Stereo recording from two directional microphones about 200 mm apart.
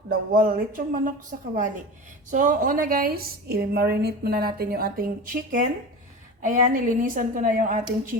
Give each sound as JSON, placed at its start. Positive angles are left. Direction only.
{"t": 0.1, "sound": "a woman's voice", "side_deg": -45}